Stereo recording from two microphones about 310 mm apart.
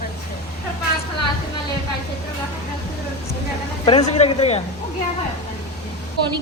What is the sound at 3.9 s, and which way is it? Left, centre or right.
Speech, left.